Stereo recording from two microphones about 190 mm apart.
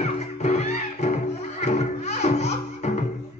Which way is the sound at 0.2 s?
35° left (ahead or behind).